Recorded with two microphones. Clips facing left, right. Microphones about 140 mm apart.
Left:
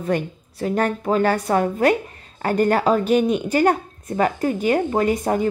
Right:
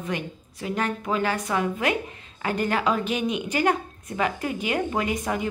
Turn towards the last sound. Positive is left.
turn(degrees=40)  # may be behind; listen again after turning